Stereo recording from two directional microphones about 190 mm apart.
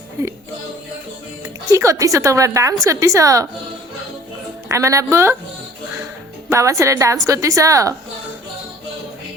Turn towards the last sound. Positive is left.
turn(degrees=-15)  # may be behind; listen again after turning